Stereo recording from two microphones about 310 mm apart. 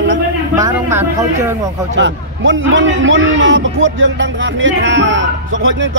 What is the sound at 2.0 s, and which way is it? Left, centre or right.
A man's voice, right.